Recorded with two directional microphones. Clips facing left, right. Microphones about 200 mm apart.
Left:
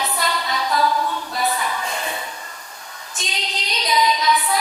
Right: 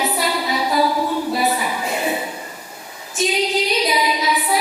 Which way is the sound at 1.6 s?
10° right (ahead or behind).